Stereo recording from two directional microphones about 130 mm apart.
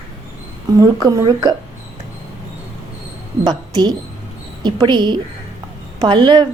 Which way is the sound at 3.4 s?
30° right (ahead or behind).